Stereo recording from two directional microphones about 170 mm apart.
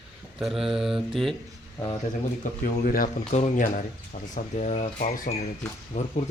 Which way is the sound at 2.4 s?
55° left (ahead or behind).